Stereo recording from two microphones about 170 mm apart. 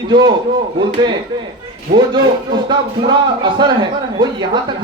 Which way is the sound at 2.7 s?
25° right (ahead or behind).